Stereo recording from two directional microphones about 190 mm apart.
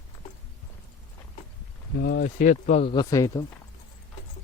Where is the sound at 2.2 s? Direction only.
45° left (ahead or behind); by 3.5 s 20° left (ahead or behind).